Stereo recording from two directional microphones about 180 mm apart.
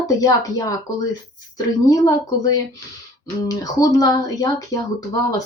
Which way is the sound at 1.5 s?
20° left (ahead or behind).